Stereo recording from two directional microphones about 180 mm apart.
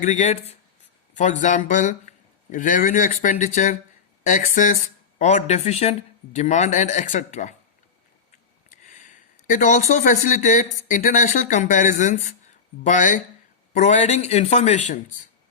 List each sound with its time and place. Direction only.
0.0 s speech: 45° left (ahead or behind)
8.7 s a sound: 45° left (ahead or behind)
10.8 s speech: 45° left (ahead or behind)